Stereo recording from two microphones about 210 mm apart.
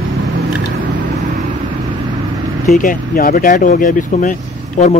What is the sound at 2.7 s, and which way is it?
Speech, 40° left (ahead or behind).